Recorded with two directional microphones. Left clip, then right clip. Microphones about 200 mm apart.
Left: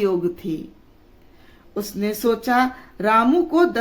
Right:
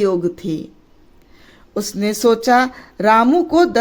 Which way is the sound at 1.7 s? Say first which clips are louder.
Right 4 dB; 40° right (ahead or behind).